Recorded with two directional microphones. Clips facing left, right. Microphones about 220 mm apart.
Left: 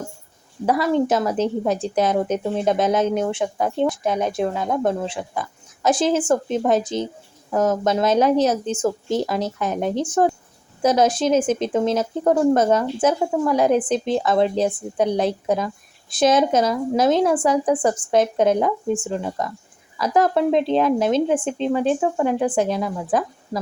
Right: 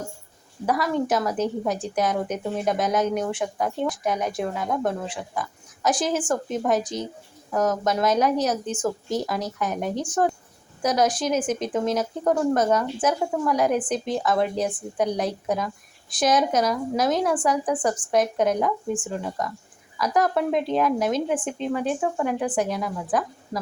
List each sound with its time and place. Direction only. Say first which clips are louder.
0.6 s a woman's voice: left 5 dB; 25° left (ahead or behind)